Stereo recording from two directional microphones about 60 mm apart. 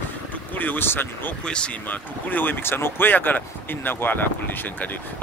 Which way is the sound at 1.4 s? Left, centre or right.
Centre.